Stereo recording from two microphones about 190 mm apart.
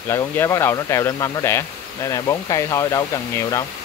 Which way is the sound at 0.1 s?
15° left (ahead or behind).